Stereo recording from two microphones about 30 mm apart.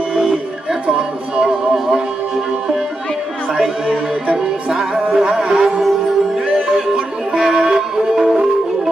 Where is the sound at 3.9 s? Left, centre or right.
Right.